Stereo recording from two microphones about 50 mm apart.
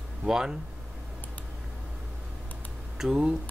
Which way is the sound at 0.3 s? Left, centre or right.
Centre.